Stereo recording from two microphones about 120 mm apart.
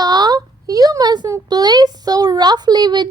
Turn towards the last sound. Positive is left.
turn(degrees=-40)  # may be behind; listen again after turning